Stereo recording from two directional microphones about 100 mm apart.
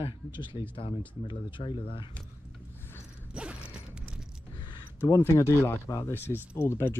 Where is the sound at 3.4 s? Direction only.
10° right (ahead or behind).